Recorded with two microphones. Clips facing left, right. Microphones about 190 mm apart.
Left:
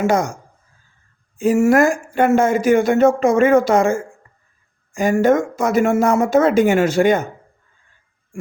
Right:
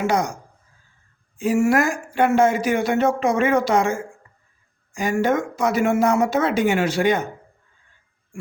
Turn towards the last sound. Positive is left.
turn(degrees=45)  # may be behind; listen again after turning